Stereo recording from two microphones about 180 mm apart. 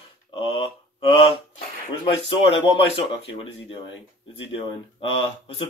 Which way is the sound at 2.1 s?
30° left (ahead or behind).